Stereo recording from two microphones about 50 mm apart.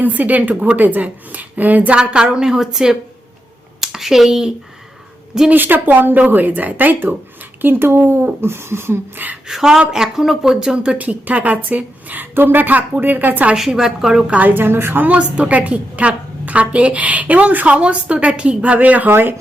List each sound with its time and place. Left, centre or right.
0.0 s a woman's voice: right
2.0 s a woman's voice: centre
5.5 s a woman's voice: right
9.5 s a woman's voice: centre
10.9 s a woman's voice: right
13.6 s a woman's voice: centre
14.3 s a woman's voice: right
14.5 s speech: right
15.0 s a woman's voice: right